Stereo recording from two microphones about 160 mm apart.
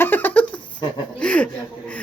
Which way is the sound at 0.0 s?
10° left (ahead or behind).